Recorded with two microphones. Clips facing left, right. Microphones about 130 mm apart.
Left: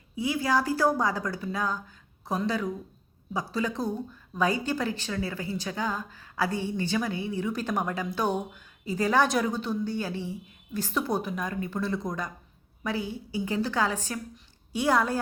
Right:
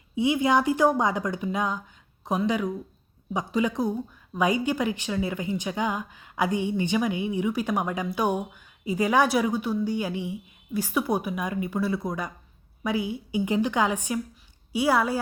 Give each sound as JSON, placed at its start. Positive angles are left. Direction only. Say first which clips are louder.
{"t": 0.2, "sound": "a woman's voice", "louder": "right 4 dB", "side_deg": -20}